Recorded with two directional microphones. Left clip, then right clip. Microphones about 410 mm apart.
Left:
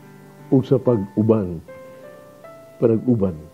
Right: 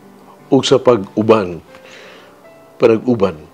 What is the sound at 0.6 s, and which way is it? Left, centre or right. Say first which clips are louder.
Speech: right 8 dB; centre.